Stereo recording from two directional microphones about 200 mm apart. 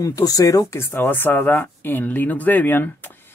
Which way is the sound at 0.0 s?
15° left (ahead or behind).